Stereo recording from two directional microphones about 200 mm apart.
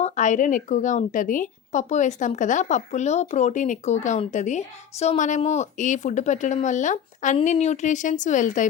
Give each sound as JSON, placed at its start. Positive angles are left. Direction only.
{"t": 0.0, "sound": "speech", "side_deg": 35}